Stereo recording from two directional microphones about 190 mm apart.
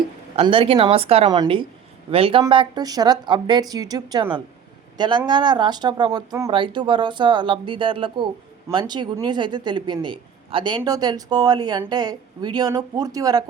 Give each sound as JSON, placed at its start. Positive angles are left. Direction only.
{"t": 0.3, "sound": "a man's voice", "side_deg": -30}